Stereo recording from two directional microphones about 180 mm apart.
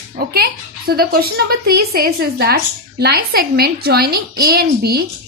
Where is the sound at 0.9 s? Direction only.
55° right (ahead or behind).